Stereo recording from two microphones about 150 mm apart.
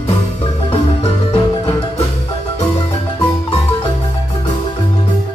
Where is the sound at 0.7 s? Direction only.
35° left (ahead or behind).